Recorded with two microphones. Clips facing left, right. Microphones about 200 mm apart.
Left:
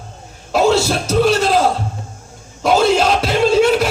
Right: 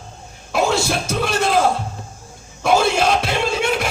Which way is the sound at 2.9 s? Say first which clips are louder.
Left 3 dB; 50° right (ahead or behind).